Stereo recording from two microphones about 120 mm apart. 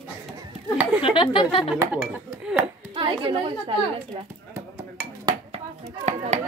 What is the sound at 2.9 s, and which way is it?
Speech, 45° right (ahead or behind).